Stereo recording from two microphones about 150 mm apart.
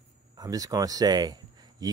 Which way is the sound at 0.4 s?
25° right (ahead or behind).